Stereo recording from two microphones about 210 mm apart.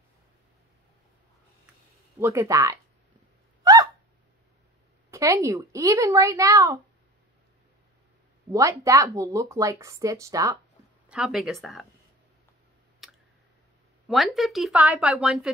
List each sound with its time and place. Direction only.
2.1 s speech: 15° right (ahead or behind)
3.6 s owl: 15° right (ahead or behind)
5.1 s speech: 15° right (ahead or behind)
8.5 s speech: 15° right (ahead or behind)
11.1 s a woman's voice: 5° right (ahead or behind)
14.0 s a woman's voice: centre (ahead or behind)